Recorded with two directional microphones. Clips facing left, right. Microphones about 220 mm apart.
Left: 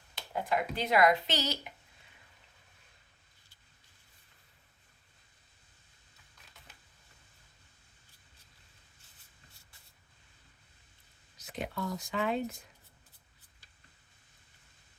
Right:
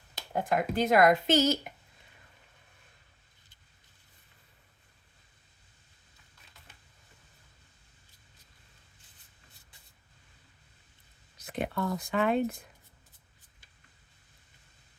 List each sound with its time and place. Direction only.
0.2 s speech: 45° right (ahead or behind)
11.3 s speech: 55° right (ahead or behind)